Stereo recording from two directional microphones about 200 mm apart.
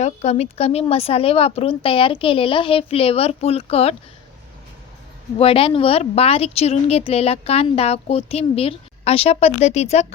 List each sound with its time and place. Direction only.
0.0 s a woman's voice: 30° left (ahead or behind)
5.4 s speech: 30° left (ahead or behind)